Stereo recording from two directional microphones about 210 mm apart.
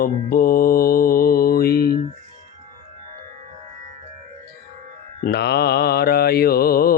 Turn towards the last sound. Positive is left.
turn(degrees=45)  # may be behind; listen again after turning